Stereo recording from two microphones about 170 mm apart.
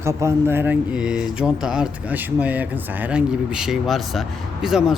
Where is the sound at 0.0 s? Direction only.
15° right (ahead or behind).